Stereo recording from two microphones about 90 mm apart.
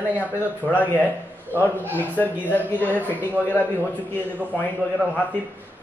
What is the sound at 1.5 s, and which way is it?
Speech, 25° right (ahead or behind).